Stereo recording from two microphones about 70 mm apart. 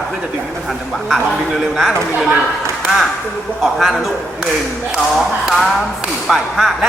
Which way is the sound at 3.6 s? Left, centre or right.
Centre.